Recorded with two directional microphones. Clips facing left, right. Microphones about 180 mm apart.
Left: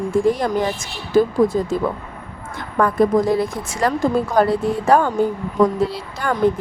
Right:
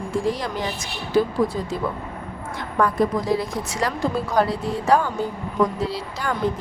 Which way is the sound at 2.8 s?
50° left (ahead or behind).